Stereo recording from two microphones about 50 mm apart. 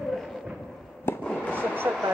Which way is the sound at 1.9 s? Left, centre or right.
Right.